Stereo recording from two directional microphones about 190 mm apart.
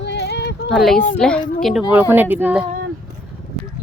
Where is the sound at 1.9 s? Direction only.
10° right (ahead or behind).